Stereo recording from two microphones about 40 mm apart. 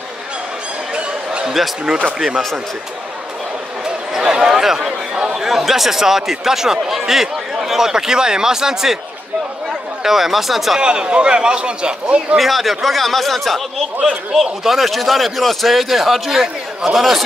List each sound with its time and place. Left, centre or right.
1.4 s basketball bounce: centre
2.1 s speech: centre
3.8 s speech: centre
10.0 s speech: centre
10.8 s a man's voice: right
12.4 s a man's voice: centre